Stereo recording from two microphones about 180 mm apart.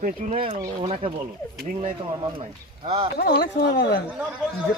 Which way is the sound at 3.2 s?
75° left (ahead or behind).